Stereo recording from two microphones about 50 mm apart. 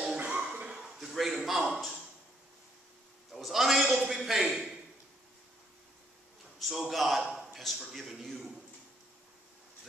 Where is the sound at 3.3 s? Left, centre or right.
Centre.